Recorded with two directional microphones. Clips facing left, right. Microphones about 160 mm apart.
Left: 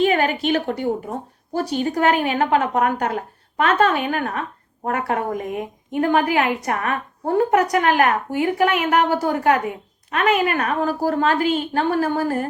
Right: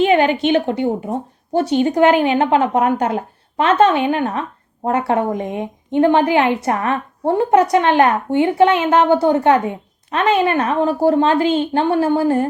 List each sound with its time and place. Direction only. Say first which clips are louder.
0.0 s a woman's voice: right 4 dB; 25° right (ahead or behind)